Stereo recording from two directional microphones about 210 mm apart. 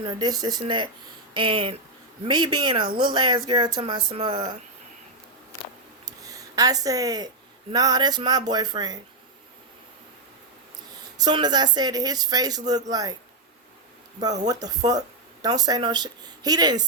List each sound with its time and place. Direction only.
0.0 s speech: 20° right (ahead or behind)
6.1 s a sound: 15° right (ahead or behind)
7.7 s speech: 20° right (ahead or behind)
11.2 s speech: 20° right (ahead or behind)
14.4 s speech: 20° right (ahead or behind)